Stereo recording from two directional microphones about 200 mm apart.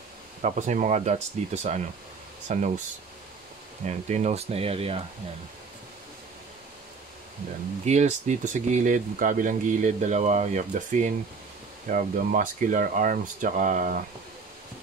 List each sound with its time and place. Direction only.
0.4 s speech: 35° right (ahead or behind)
3.8 s speech: 35° right (ahead or behind)
7.8 s speech: 35° right (ahead or behind)